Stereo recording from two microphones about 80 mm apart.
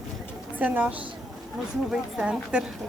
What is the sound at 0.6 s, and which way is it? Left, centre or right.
Speech, centre.